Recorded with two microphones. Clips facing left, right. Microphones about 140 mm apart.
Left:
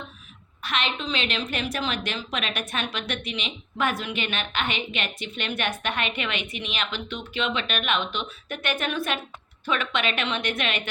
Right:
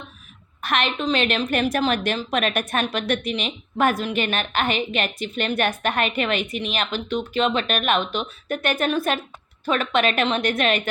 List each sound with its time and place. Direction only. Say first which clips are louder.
0.6 s a woman's voice: right 6 dB; 50° right (ahead or behind)